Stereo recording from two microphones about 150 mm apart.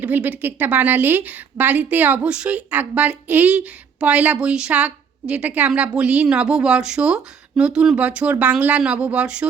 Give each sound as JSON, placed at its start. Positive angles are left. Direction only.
{"t": 0.0, "sound": "a woman's voice", "side_deg": -10}